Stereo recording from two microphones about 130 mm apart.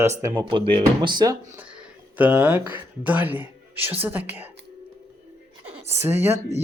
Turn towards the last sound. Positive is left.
turn(degrees=-15)  # may be behind; listen again after turning